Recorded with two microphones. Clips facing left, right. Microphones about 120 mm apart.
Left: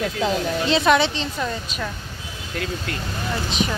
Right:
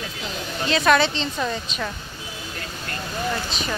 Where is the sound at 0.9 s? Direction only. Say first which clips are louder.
Even; 15° left (ahead or behind).